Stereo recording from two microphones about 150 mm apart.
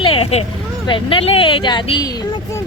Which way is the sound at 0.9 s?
35° left (ahead or behind).